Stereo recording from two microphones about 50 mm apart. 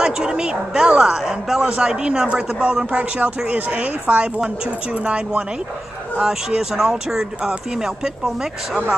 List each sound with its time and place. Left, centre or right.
0.0 s speech: centre
6.1 s speech: centre